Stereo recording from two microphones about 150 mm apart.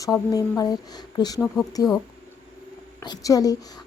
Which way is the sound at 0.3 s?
25° left (ahead or behind).